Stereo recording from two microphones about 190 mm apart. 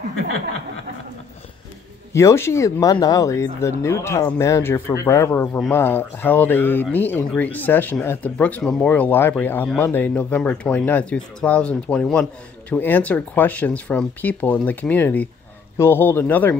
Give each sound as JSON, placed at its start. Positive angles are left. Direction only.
{"t": 2.1, "sound": "speech", "side_deg": 15}